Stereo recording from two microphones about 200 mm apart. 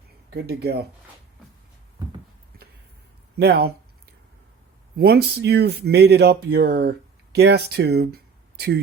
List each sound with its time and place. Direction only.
0.3 s speech: 55° right (ahead or behind)
3.3 s speech: 55° right (ahead or behind)
4.9 s speech: 50° right (ahead or behind)